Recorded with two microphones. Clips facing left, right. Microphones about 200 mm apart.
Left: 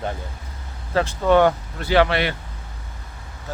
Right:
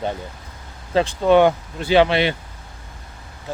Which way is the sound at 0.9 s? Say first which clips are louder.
Right 2 dB; 20° right (ahead or behind).